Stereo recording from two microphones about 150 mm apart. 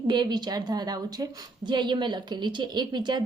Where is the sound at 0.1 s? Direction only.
30° right (ahead or behind).